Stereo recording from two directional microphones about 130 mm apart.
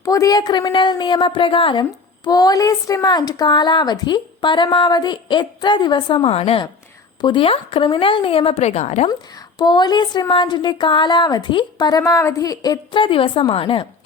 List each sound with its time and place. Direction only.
0.0 s a woman's voice: 25° left (ahead or behind)
6.3 s speech: 50° left (ahead or behind)
9.6 s a woman's voice: 35° left (ahead or behind)
12.9 s a woman's voice: 40° left (ahead or behind)